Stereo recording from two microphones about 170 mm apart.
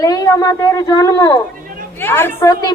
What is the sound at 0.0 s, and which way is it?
A woman's voice, 20° left (ahead or behind).